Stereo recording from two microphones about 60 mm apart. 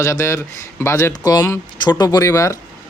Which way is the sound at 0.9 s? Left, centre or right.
Left.